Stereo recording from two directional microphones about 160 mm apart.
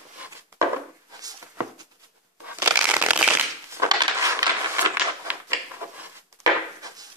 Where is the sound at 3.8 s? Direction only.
20° right (ahead or behind).